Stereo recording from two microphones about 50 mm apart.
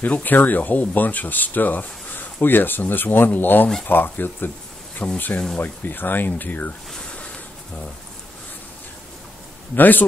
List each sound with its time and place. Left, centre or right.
0.0 s speech: left
4.9 s speech: left
5.6 s speech: left
9.8 s speech: left